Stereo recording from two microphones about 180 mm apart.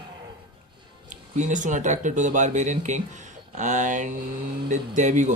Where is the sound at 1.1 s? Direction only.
45° right (ahead or behind).